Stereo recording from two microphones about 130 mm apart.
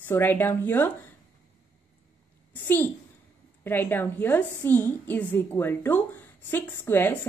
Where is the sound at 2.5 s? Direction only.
15° left (ahead or behind).